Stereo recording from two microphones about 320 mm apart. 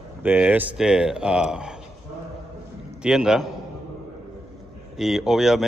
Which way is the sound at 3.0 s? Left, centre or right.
Centre.